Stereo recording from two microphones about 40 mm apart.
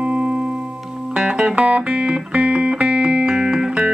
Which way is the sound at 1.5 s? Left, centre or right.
Right.